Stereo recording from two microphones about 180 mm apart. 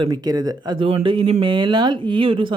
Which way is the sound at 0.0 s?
20° right (ahead or behind).